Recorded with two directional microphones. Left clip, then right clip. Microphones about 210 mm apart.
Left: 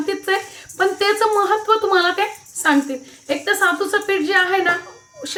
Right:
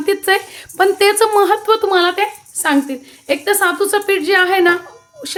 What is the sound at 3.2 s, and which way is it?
Speech, 40° right (ahead or behind).